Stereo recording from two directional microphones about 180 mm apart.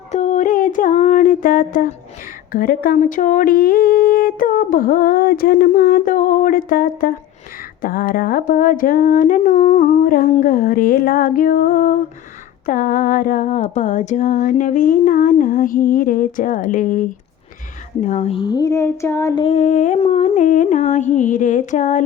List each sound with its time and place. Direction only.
0.1 s a sound: 40° left (ahead or behind)
2.5 s speech: 50° left (ahead or behind); by 19.3 s 15° left (ahead or behind)
19.4 s speech: 35° left (ahead or behind)